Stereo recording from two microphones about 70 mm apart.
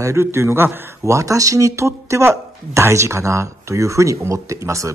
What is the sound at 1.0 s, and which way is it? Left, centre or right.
Speech, right.